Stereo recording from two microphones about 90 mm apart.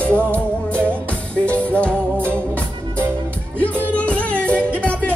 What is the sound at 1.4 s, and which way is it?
Music, 15° left (ahead or behind).